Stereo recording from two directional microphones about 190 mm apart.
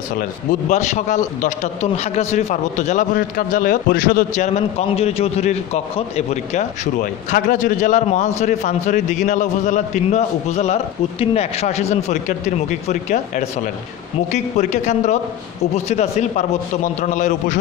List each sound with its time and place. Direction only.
0.5 s a man's voice: 40° left (ahead or behind)
4.6 s a man's voice: 35° left (ahead or behind)